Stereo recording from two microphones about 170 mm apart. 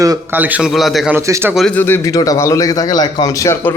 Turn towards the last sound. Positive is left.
turn(degrees=15)  # may be behind; listen again after turning